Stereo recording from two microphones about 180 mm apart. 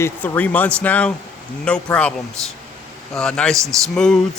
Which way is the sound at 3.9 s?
5° left (ahead or behind).